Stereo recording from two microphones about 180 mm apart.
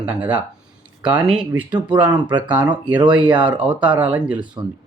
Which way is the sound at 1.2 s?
5° right (ahead or behind).